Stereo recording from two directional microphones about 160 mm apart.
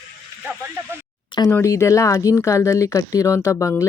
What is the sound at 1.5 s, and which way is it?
Speech, 20° left (ahead or behind).